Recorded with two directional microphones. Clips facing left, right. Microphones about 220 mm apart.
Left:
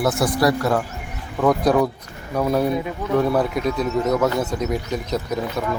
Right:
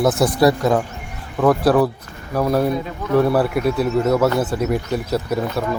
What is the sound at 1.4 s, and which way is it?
Speech, 5° right (ahead or behind).